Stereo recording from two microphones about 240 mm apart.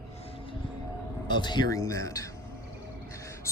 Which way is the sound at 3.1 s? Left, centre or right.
Centre.